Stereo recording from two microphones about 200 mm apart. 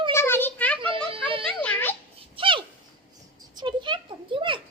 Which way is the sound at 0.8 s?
25° right (ahead or behind).